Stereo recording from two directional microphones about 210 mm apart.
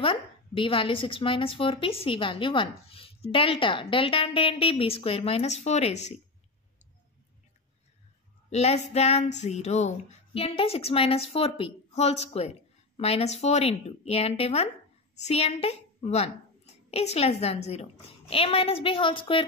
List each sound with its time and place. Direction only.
0.0 s speech: 25° left (ahead or behind)
8.5 s a child's voice: 30° left (ahead or behind)